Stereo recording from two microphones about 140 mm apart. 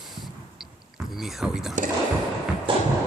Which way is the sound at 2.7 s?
35° right (ahead or behind).